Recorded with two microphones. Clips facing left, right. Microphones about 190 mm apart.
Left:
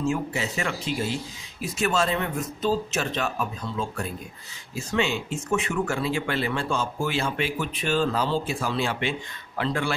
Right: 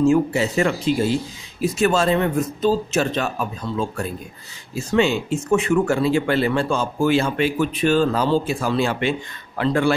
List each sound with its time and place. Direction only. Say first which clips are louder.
0.1 s a man's voice: right 10 dB; 35° right (ahead or behind)